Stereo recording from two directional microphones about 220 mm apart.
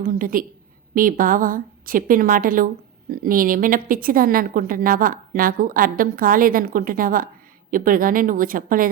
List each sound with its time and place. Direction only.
0.0 s a woman's voice: 40° right (ahead or behind)